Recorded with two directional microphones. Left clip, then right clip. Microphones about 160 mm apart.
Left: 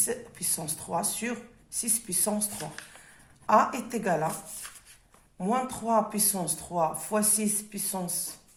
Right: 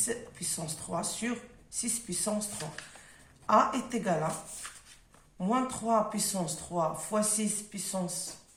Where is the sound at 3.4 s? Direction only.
50° left (ahead or behind).